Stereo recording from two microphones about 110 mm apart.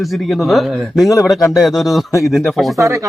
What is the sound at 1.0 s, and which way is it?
Speech, 30° left (ahead or behind).